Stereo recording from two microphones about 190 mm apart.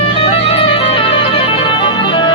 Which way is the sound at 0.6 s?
30° left (ahead or behind).